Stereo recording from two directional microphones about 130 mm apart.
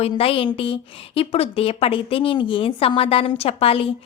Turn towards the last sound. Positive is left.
turn(degrees=50)  # may be behind; listen again after turning